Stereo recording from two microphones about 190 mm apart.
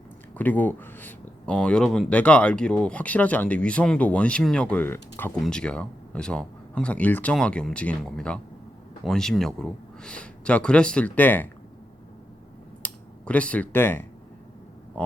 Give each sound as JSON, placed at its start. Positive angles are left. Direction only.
{"t": 0.3, "sound": "speech", "side_deg": 10}
{"t": 12.8, "sound": "computer keyboard", "side_deg": 5}